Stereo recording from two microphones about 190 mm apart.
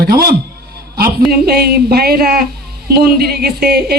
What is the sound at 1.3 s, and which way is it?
Speech, 55° right (ahead or behind).